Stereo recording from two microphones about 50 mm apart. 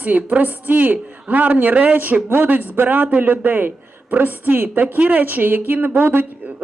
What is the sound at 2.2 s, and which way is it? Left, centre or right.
A woman's voice, right.